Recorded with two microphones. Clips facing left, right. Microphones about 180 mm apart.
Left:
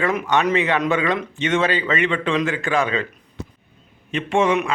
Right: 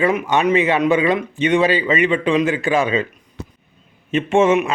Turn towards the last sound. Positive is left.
turn(degrees=-25)  # may be behind; listen again after turning